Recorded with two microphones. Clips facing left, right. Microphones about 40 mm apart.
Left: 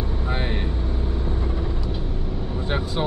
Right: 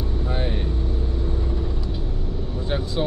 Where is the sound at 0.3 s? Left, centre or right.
Left.